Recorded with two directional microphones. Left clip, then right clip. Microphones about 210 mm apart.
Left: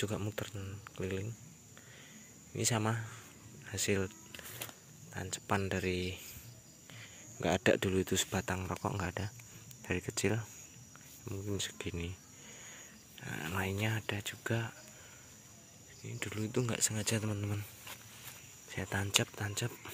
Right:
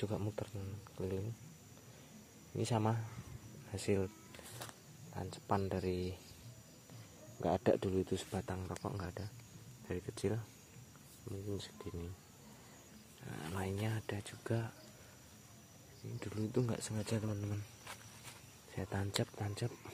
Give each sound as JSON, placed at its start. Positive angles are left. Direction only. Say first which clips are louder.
{"t": 0.0, "sound": "speech", "louder": "left 3 dB", "side_deg": 0}
{"t": 2.5, "sound": "speech", "louder": "left 2 dB", "side_deg": 0}
{"t": 5.1, "sound": "speech", "louder": "left 2 dB", "side_deg": 5}
{"t": 7.4, "sound": "speech", "louder": "left 3 dB", "side_deg": 5}
{"t": 13.2, "sound": "speech", "louder": "left 6 dB", "side_deg": 10}
{"t": 16.2, "sound": "speech", "louder": "left 2 dB", "side_deg": 0}
{"t": 18.7, "sound": "speech", "louder": "left 8 dB", "side_deg": 0}